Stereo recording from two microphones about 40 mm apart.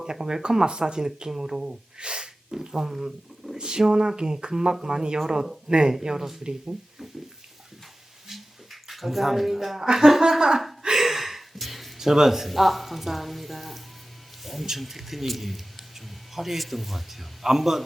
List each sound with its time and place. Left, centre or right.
0.0 s speech: centre
2.6 s speech: centre
8.3 s speech: centre
10.8 s a sound: centre
14.4 s speech: centre